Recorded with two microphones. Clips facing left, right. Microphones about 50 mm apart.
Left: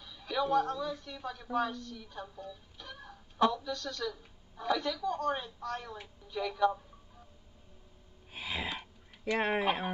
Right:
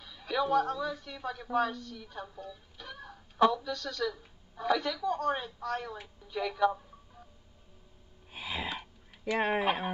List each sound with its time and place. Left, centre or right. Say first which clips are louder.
0.0 s a woman's voice: right 2 dB; centre
3.7 s speech: right 3 dB; centre
4.1 s speech: right 2 dB; centre
8.3 s throat clearing: right 1 dB; centre